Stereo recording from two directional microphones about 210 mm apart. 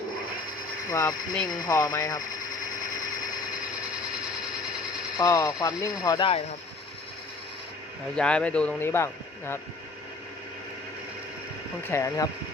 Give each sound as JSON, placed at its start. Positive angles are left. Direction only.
{"t": 0.9, "sound": "speech", "side_deg": 15}
{"t": 5.1, "sound": "speech", "side_deg": 15}
{"t": 8.1, "sound": "speech", "side_deg": 5}
{"t": 11.9, "sound": "speech", "side_deg": 15}